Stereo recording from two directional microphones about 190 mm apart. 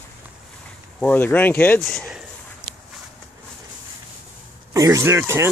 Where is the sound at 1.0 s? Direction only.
10° left (ahead or behind).